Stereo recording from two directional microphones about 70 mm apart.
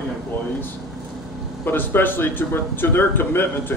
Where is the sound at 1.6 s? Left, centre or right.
Left.